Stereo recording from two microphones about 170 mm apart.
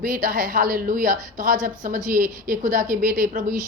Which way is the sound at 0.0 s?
55° right (ahead or behind).